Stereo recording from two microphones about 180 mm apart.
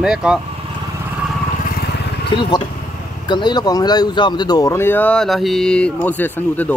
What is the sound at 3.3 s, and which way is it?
Speech, 25° left (ahead or behind).